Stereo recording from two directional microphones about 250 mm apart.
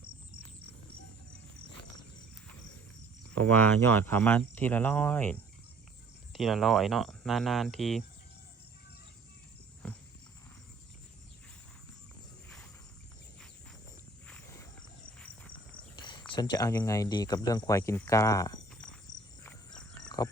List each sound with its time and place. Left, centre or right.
3.3 s speech: centre
9.8 s horse: centre
14.3 s walk: centre
15.5 s a sound: centre
16.3 s speech: centre
20.1 s pig: centre